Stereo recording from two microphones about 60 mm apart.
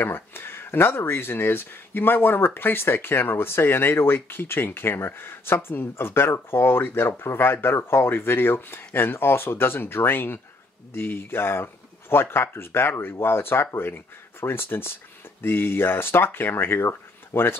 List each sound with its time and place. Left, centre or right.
0.0 s speech: left